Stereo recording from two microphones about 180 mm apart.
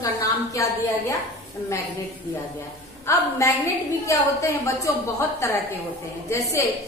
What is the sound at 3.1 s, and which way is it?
A woman's voice, 15° left (ahead or behind).